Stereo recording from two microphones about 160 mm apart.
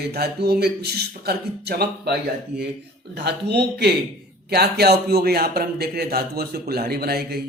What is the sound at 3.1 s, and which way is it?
A man's voice, 90° right.